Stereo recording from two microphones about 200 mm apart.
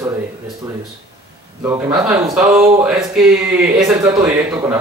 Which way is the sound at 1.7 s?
20° right (ahead or behind).